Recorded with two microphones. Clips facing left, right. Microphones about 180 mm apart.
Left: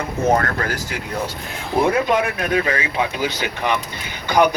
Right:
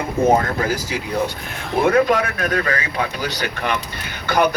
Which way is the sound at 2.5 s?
20° left (ahead or behind).